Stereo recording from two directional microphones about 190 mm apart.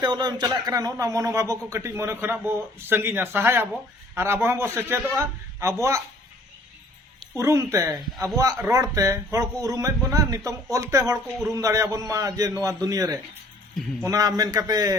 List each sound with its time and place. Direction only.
0.0 s speech: 20° right (ahead or behind)
7.3 s a man's voice: 15° right (ahead or behind)